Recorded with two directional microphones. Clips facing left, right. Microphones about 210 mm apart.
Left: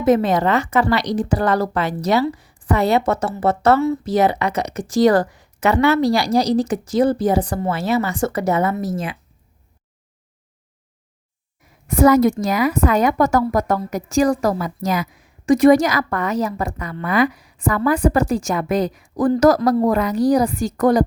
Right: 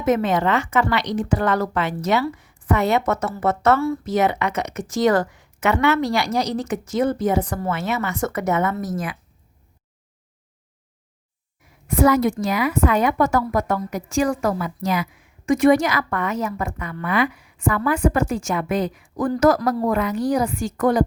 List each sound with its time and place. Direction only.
0.0 s a woman's voice: 35° left (ahead or behind)
11.9 s a woman's voice: 40° left (ahead or behind)